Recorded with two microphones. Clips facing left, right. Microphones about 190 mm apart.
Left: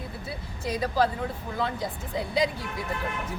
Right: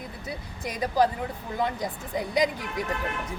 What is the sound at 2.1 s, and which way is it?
Speech, 15° right (ahead or behind).